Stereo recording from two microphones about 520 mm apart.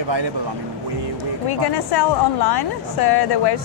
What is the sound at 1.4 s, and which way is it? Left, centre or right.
A woman's voice, left.